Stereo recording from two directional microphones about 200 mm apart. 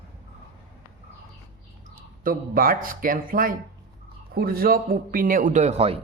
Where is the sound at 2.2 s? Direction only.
45° right (ahead or behind).